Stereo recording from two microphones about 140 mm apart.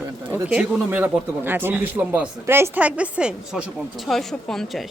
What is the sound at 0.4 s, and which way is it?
A man's voice, 10° right (ahead or behind).